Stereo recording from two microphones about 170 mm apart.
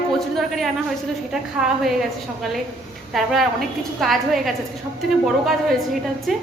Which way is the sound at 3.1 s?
Centre (ahead or behind).